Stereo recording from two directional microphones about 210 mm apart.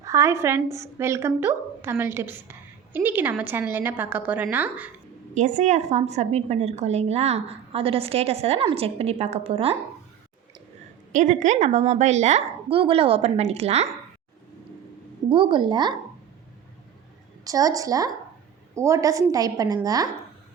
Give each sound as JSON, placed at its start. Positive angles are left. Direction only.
{"t": 0.0, "sound": "a woman's voice", "side_deg": -15}
{"t": 5.3, "sound": "a woman's voice", "side_deg": -35}
{"t": 11.1, "sound": "a woman's voice", "side_deg": -35}
{"t": 15.3, "sound": "a woman's voice", "side_deg": -25}
{"t": 17.4, "sound": "a woman's voice", "side_deg": -15}